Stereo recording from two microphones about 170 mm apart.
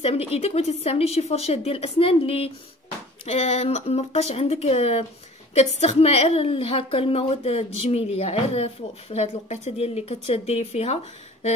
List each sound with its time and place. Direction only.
0.0 s a woman's voice: 35° left (ahead or behind)